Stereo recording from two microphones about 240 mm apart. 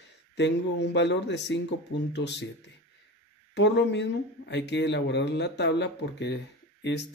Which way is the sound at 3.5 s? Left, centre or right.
Left.